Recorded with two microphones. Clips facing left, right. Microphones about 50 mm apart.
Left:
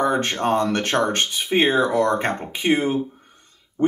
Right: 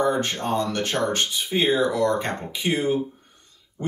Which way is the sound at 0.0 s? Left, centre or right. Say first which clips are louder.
Left 2 dB; left.